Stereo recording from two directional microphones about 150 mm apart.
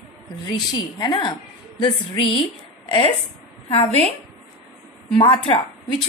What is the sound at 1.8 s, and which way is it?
Speech, 35° left (ahead or behind).